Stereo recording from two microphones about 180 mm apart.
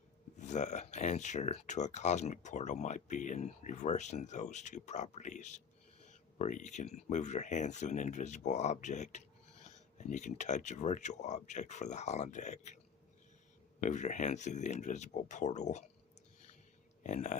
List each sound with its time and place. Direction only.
0.3 s speech: 40° left (ahead or behind)
13.8 s speech: 45° left (ahead or behind)
17.0 s speech: 40° left (ahead or behind)